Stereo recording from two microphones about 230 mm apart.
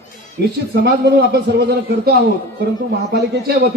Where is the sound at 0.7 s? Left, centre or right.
Right.